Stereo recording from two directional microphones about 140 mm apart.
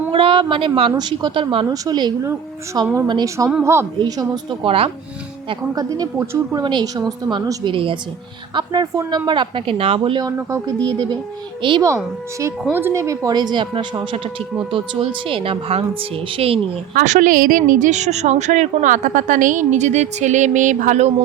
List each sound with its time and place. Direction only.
0.1 s a woman's voice: 40° right (ahead or behind); by 3.8 s 20° right (ahead or behind)
4.0 s speech: 35° right (ahead or behind)
5.5 s a woman's voice: 25° right (ahead or behind)
6.6 s speech: 30° right (ahead or behind)
10.3 s a woman's voice: 20° right (ahead or behind)
11.6 s speech: 35° right (ahead or behind)
12.7 s a woman's voice: 15° right (ahead or behind); by 13.8 s 35° right (ahead or behind)
15.3 s speech: 40° right (ahead or behind)
16.9 s a woman's voice: 65° right (ahead or behind)